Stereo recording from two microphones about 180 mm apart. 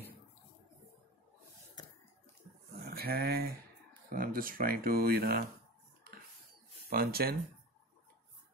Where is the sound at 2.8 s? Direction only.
60° right (ahead or behind).